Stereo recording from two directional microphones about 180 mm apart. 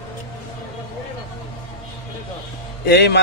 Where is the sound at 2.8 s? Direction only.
65° left (ahead or behind).